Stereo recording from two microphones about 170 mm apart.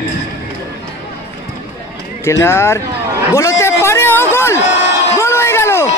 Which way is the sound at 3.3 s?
15° left (ahead or behind).